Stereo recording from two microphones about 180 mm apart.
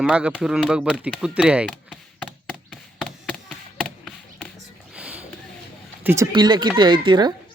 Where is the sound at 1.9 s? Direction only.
Centre (ahead or behind).